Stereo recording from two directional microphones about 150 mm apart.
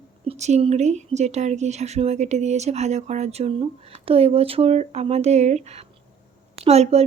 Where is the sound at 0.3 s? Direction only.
50° right (ahead or behind).